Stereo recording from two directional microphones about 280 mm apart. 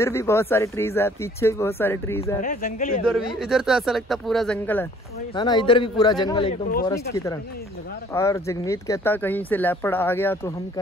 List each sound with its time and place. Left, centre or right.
0.0 s speech: centre
2.4 s speech: left
3.3 s speech: centre
5.3 s speech: centre
8.1 s speech: centre